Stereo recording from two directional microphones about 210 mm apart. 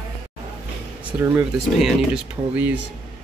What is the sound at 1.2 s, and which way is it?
Speech, 5° right (ahead or behind).